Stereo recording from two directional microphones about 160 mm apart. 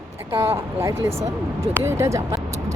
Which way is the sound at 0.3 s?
15° right (ahead or behind).